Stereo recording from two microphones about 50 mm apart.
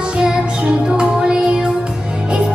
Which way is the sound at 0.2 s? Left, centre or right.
Centre.